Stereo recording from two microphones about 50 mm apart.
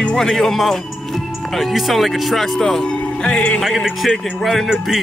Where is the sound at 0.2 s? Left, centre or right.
Centre.